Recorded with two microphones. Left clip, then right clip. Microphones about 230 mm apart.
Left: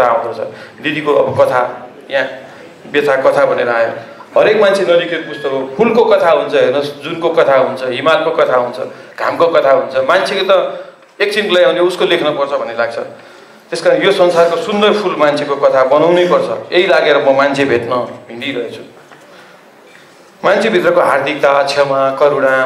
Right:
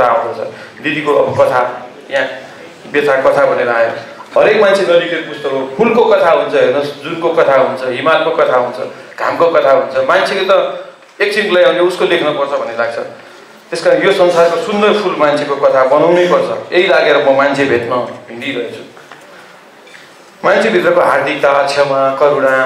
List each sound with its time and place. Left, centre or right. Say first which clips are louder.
0.0 s a sound: right 1 dB; centre
0.8 s a man's voice: even; centre
20.4 s a man's voice: right 1 dB; centre